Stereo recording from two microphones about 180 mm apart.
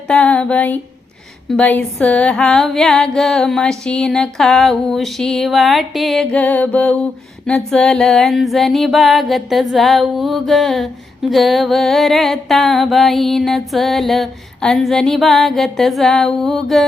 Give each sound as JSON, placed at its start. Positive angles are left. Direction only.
{"t": 0.1, "sound": "music", "side_deg": 5}